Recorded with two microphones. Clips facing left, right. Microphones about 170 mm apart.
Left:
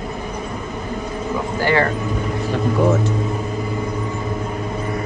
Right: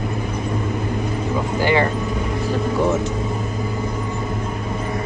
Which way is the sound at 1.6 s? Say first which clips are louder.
Even; 20° right (ahead or behind).